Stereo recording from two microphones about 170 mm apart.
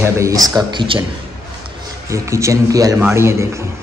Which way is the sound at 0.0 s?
20° right (ahead or behind).